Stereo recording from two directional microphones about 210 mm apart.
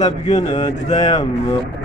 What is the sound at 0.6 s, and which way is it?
Speech, 25° left (ahead or behind).